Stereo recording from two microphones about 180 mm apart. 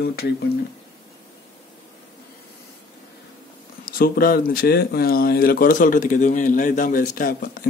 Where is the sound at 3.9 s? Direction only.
55° left (ahead or behind).